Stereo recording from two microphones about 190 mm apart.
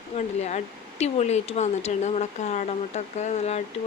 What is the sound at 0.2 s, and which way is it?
Speech, 35° left (ahead or behind).